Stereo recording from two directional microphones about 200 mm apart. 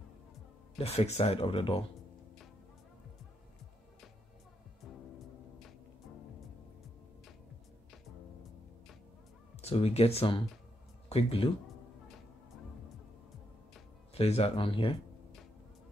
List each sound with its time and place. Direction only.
0.7 s speech: 30° left (ahead or behind)
9.6 s speech: 30° left (ahead or behind)
14.1 s speech: 30° left (ahead or behind)